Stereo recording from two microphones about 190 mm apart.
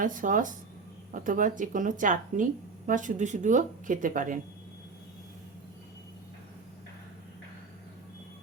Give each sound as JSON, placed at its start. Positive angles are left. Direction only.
{"t": 0.0, "sound": "a woman's voice", "side_deg": -45}